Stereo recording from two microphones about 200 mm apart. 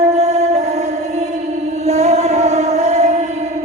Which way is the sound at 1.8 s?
35° right (ahead or behind).